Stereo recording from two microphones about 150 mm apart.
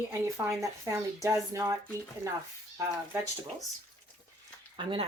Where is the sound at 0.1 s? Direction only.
20° right (ahead or behind).